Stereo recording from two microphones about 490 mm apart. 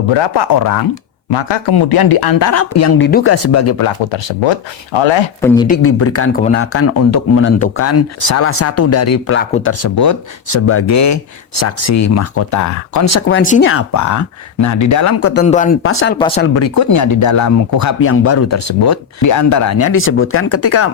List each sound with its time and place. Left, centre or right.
0.1 s speech: left; by 3.3 s centre
3.3 s speech: left
4.1 s speech: left
5.4 s speech: centre
5.6 s speech: left
15.3 s speech: centre
16.1 s speech: centre
16.6 s speech: left